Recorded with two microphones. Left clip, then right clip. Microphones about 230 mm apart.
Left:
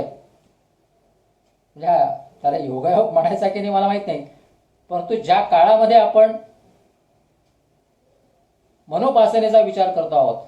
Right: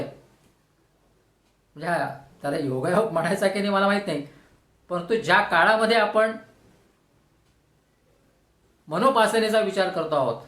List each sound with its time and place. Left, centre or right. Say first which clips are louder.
1.7 s speech: left 10 dB; right
8.9 s speech: left 5 dB; right